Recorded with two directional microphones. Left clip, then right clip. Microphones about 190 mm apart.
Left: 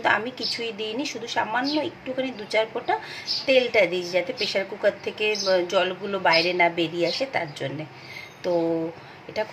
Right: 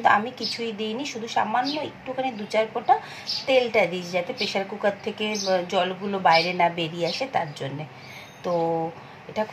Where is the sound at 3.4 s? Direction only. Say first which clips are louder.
Left 1 dB; 25° left (ahead or behind).